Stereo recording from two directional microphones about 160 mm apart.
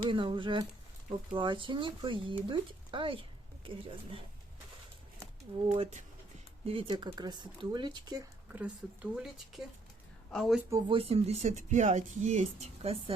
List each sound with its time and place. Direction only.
0.1 s speech: 30° right (ahead or behind)
5.7 s speech: 45° right (ahead or behind); by 8.3 s 25° right (ahead or behind)
8.5 s speech: 5° right (ahead or behind)
10.6 s speech: 20° right (ahead or behind)
10.8 s speech: 35° right (ahead or behind)